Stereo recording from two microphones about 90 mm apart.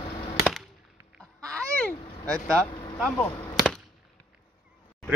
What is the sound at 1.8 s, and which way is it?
Vehicle, 15° left (ahead or behind).